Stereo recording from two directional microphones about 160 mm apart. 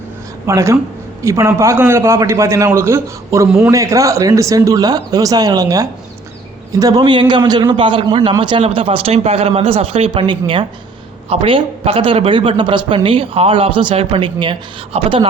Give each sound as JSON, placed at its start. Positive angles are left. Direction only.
{"t": 0.4, "sound": "a man's voice", "side_deg": -20}